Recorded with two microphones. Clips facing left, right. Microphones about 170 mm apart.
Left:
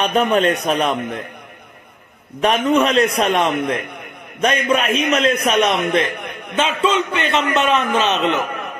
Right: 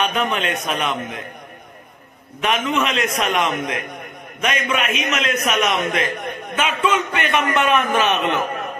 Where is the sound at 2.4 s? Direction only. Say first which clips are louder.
Left 5 dB; 35° left (ahead or behind); by 8.4 s 20° left (ahead or behind).